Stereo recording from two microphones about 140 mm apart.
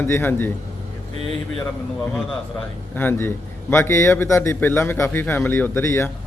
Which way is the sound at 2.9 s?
15° left (ahead or behind).